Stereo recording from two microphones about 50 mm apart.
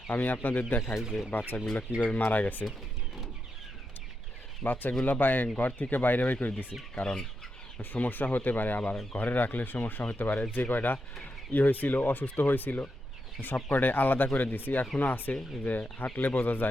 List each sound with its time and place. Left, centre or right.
0.1 s speech: left
0.9 s speech: centre
1.3 s speech: left
4.6 s speech: left
6.9 s speech: centre
7.9 s speech: left